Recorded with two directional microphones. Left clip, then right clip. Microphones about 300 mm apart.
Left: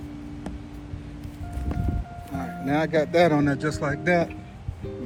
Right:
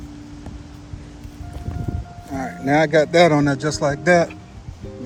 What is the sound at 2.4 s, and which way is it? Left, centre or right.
A man's voice, right.